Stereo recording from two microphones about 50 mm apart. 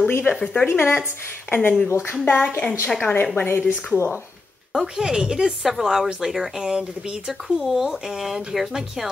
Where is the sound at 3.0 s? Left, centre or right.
Left.